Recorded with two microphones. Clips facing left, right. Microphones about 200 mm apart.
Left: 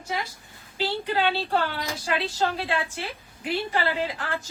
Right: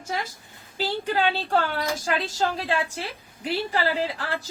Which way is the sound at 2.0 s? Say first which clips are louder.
Left 3 dB; 40° right (ahead or behind).